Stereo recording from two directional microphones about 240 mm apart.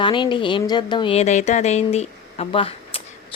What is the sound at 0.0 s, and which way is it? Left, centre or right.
Speech, centre.